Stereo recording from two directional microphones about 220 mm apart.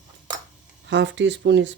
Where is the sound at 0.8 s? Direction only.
55° right (ahead or behind).